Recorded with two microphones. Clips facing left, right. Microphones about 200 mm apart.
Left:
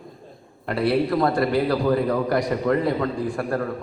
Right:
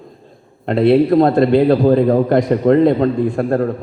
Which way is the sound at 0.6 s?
25° right (ahead or behind).